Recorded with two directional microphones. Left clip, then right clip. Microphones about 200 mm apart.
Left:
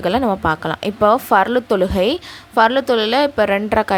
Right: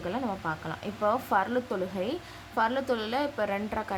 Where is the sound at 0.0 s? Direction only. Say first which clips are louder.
Left 15 dB; 50° left (ahead or behind).